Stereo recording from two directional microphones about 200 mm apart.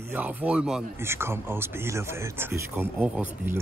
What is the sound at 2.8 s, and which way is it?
Speech, 10° right (ahead or behind).